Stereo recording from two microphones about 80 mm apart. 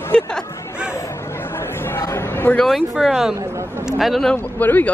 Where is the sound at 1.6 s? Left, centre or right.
Left.